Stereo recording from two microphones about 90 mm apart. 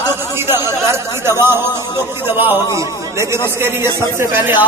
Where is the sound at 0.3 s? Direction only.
30° right (ahead or behind).